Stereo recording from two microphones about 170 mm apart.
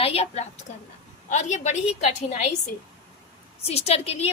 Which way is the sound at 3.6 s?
40° left (ahead or behind).